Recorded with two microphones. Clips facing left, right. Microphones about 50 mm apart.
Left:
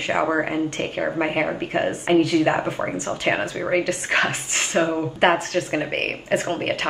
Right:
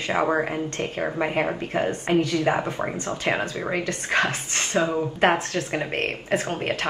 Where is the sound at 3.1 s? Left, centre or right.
Left.